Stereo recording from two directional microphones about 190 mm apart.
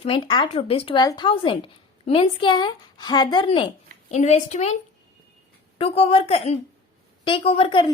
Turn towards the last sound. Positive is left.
turn(degrees=30)  # may be behind; listen again after turning